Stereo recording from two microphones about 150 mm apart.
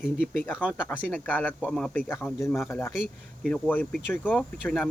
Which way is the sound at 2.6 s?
15° left (ahead or behind).